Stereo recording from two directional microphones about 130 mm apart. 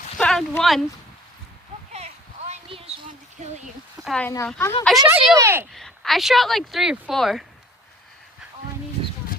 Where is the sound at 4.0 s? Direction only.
5° right (ahead or behind).